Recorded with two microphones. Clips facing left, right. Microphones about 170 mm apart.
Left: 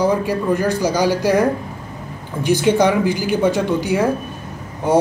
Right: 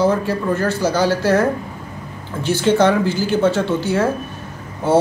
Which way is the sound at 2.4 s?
15° left (ahead or behind).